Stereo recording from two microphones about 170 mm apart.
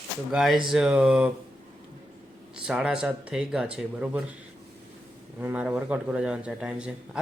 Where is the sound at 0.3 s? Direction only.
Centre (ahead or behind).